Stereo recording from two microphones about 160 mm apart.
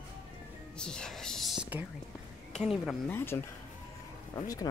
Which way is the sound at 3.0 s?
15° left (ahead or behind).